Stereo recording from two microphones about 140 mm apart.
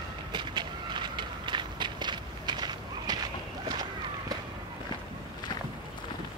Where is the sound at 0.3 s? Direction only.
35° right (ahead or behind).